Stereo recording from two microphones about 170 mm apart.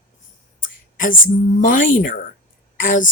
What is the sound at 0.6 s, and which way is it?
Whispering, 55° left (ahead or behind).